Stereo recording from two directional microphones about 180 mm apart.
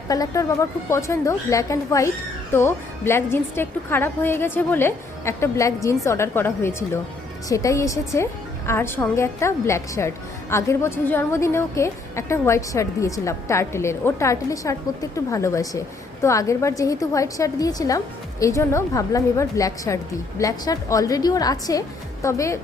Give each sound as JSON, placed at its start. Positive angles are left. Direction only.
{"t": 0.1, "sound": "a woman's voice", "side_deg": 20}